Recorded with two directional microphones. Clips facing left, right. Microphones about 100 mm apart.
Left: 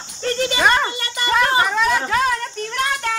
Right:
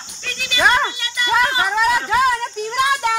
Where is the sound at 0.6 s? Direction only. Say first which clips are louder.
Right 2 dB; 5° right (ahead or behind).